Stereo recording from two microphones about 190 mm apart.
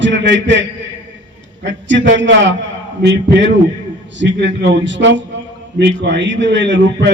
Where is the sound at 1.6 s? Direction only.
70° right (ahead or behind).